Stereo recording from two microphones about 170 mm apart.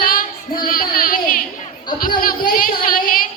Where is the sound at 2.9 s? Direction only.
55° left (ahead or behind).